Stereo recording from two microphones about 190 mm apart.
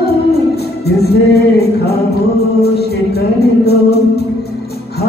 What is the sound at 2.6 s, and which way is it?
Music, 55° left (ahead or behind).